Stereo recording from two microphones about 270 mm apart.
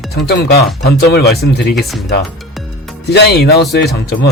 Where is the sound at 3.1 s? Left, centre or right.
Left.